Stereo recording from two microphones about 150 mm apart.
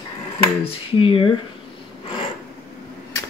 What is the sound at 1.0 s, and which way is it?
Speech, 35° left (ahead or behind).